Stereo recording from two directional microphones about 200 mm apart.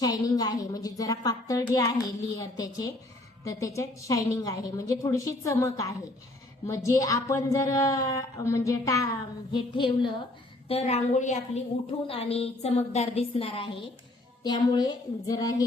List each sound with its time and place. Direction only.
0.0 s a woman's voice: 20° left (ahead or behind)